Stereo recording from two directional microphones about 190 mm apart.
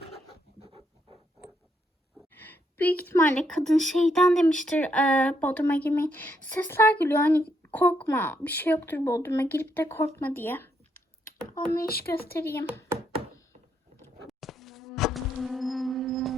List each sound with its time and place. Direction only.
2.3 s a woman's voice: 10° left (ahead or behind)
11.9 s speech: 55° left (ahead or behind)
12.4 s a woman's voice: 15° left (ahead or behind)
14.3 s insect: centre (ahead or behind)